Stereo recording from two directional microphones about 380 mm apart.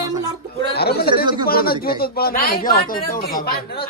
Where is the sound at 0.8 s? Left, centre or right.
Left.